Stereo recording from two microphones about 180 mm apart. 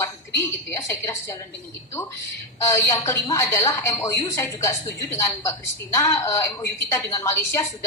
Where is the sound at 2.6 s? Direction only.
15° left (ahead or behind).